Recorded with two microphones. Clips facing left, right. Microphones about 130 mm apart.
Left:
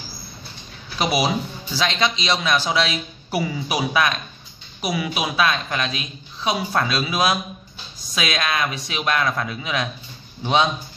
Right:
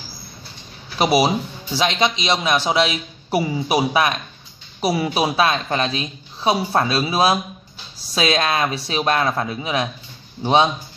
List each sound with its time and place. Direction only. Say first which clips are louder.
0.9 s a woman's voice: right 4 dB; 25° right (ahead or behind)